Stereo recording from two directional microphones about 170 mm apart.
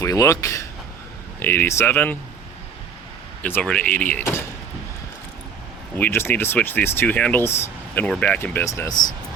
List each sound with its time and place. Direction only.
0.0 s speech: 20° left (ahead or behind)
3.4 s speech: 10° left (ahead or behind)
6.0 s speech: 15° left (ahead or behind)